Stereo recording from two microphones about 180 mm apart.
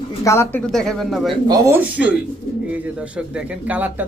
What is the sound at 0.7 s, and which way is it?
Speech, centre (ahead or behind).